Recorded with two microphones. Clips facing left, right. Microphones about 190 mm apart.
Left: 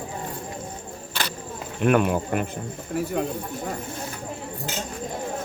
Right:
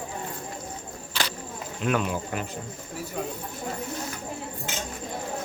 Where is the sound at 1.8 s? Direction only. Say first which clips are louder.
Left 6 dB; 55° left (ahead or behind).